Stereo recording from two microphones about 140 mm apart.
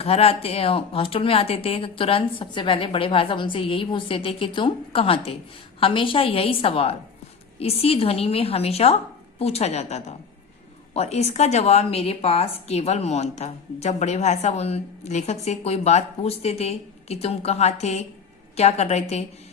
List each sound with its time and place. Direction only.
0.0 s a woman's voice: 45° left (ahead or behind)